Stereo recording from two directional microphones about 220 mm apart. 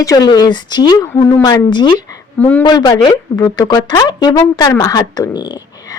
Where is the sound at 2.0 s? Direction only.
10° left (ahead or behind).